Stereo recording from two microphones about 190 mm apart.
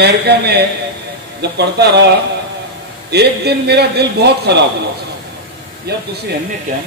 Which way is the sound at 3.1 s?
60° right (ahead or behind).